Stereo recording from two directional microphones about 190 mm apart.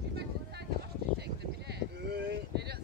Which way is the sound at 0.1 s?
60° right (ahead or behind).